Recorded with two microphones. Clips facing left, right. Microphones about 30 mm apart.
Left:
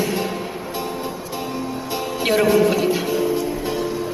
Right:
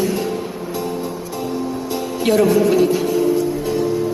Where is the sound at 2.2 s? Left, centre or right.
Centre.